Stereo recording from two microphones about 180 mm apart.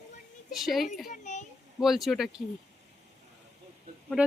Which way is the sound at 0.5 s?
Centre (ahead or behind).